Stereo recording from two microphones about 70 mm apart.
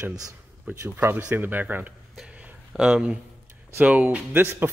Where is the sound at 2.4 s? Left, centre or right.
Centre.